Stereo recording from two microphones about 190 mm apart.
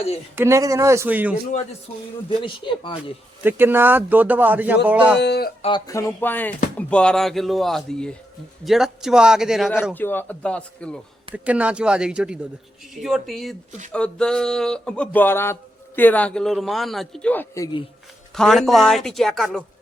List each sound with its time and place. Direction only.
0.3 s speech: 15° right (ahead or behind)
2.4 s speech: 25° left (ahead or behind)
3.4 s speech: 10° right (ahead or behind)
5.2 s speech: 60° left (ahead or behind)
5.6 s a man's voice: 20° left (ahead or behind); by 9.7 s centre (ahead or behind)
9.9 s speech: 10° left (ahead or behind)
11.4 s a man's voice: 5° right (ahead or behind); by 17.8 s 20° left (ahead or behind)
18.3 s a man's voice: centre (ahead or behind)